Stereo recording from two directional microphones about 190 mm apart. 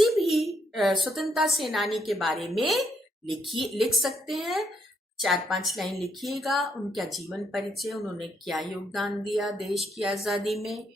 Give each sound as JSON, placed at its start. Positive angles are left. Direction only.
{"t": 0.2, "sound": "a child's voice", "side_deg": 0}